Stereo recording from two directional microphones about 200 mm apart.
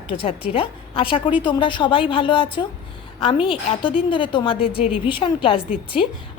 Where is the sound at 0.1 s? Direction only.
25° left (ahead or behind).